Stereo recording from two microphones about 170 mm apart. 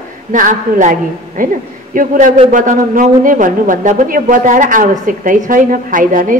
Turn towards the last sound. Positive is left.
turn(degrees=-50)  # may be behind; listen again after turning